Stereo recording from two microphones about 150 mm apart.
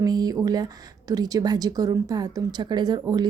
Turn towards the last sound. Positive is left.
turn(degrees=-30)  # may be behind; listen again after turning